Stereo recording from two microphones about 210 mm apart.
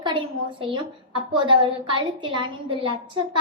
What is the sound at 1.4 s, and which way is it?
A woman's voice, 25° right (ahead or behind).